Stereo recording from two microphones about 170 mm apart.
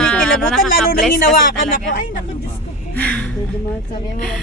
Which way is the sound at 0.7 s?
60° left (ahead or behind).